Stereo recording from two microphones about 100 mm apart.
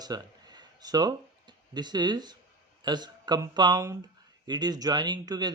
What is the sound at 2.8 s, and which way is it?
Speech, 45° right (ahead or behind).